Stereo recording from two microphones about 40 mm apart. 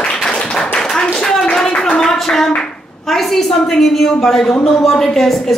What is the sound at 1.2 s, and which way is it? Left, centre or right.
Clapping, centre.